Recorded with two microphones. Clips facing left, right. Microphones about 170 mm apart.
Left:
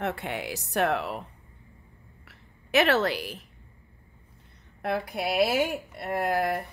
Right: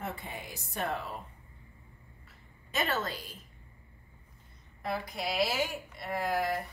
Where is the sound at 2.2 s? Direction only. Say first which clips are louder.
Left 3 dB; 75° left (ahead or behind).